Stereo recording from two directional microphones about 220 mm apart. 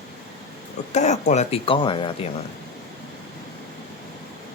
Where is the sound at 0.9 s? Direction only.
30° left (ahead or behind).